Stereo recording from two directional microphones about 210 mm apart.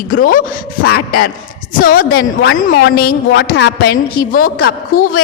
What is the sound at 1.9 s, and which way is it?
A woman's voice, 45° left (ahead or behind).